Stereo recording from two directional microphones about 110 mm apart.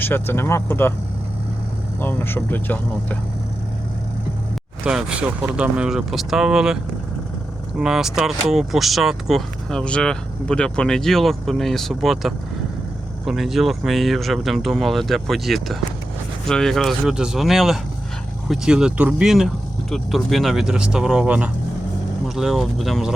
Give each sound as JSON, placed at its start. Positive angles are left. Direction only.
{"t": 0.0, "sound": "speech", "side_deg": 20}
{"t": 2.0, "sound": "speech", "side_deg": 20}
{"t": 4.8, "sound": "speech", "side_deg": -5}
{"t": 7.8, "sound": "speech", "side_deg": -5}